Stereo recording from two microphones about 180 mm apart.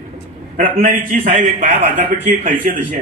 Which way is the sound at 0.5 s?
50° right (ahead or behind).